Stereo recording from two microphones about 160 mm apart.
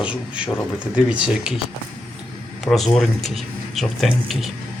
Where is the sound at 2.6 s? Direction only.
Centre (ahead or behind).